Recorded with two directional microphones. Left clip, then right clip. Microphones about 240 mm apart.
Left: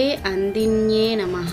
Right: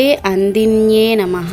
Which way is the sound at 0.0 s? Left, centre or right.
Right.